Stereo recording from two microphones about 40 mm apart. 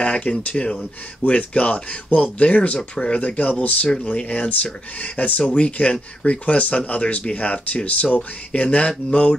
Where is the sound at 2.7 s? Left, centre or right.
Centre.